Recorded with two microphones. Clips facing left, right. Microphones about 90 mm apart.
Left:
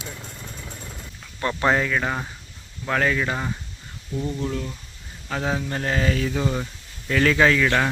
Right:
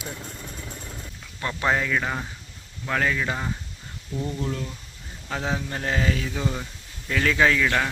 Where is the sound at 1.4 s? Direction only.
15° left (ahead or behind); by 6.3 s 5° right (ahead or behind).